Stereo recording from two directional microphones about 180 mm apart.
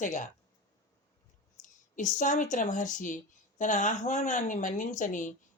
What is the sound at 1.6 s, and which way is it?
Speech, 45° left (ahead or behind).